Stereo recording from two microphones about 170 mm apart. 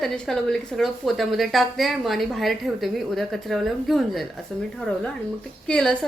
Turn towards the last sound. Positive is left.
turn(degrees=5)  # may be behind; listen again after turning